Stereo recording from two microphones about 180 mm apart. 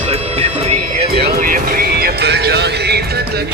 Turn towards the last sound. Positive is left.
turn(degrees=-65)  # may be behind; listen again after turning